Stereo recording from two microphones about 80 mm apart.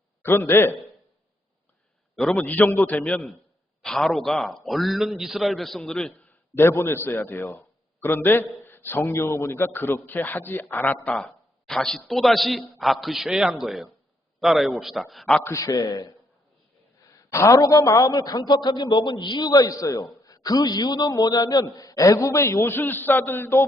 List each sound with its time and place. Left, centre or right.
0.3 s a man's voice: left
2.1 s a man's voice: centre
2.4 s a man's voice: left
3.8 s a man's voice: centre
5.8 s a man's voice: centre
6.6 s a man's voice: left
11.7 s a man's voice: centre
15.3 s a man's voice: centre
15.5 s a man's voice: left
17.0 s a man's voice: left